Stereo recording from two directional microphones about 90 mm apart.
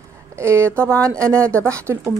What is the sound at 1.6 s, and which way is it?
Speech, 35° right (ahead or behind).